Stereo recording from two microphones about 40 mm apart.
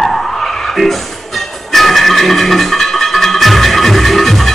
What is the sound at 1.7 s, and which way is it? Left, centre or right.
Music, centre.